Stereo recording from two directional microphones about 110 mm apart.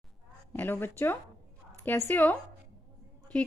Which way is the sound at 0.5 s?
20° left (ahead or behind).